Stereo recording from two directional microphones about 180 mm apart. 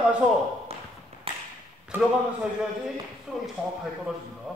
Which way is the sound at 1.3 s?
30° right (ahead or behind).